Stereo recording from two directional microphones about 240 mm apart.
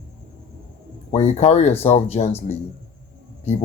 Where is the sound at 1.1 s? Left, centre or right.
Left.